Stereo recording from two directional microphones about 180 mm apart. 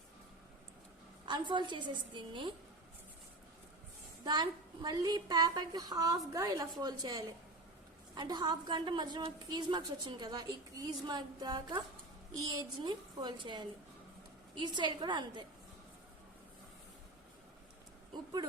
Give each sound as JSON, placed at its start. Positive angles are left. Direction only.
{"t": 1.2, "sound": "a woman's voice", "side_deg": -25}
{"t": 4.2, "sound": "a woman's voice", "side_deg": -25}
{"t": 14.8, "sound": "a woman's voice", "side_deg": -25}
{"t": 18.1, "sound": "a sound", "side_deg": -20}